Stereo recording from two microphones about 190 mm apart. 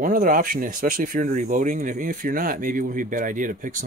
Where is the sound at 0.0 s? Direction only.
45° right (ahead or behind).